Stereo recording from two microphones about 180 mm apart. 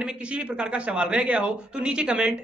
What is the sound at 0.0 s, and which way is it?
Speech, 5° right (ahead or behind).